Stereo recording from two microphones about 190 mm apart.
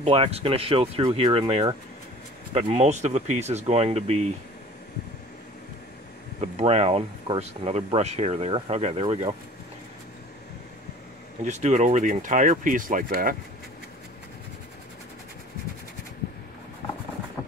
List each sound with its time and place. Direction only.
0.0 s speech: 30° right (ahead or behind)
6.4 s speech: 35° right (ahead or behind)
11.4 s speech: 35° right (ahead or behind)